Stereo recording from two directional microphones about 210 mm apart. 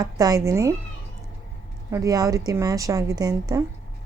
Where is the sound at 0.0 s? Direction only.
20° right (ahead or behind).